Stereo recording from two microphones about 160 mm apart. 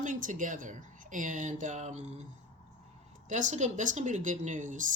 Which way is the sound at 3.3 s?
50° right (ahead or behind).